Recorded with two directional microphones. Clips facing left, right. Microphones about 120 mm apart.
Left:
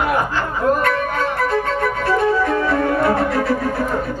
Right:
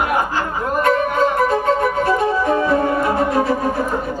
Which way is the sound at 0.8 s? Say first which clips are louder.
Right 4 dB; 20° right (ahead or behind).